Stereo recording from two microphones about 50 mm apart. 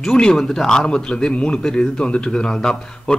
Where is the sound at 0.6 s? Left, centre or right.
Centre.